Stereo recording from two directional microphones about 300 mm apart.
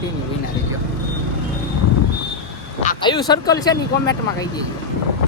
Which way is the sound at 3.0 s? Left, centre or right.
Centre.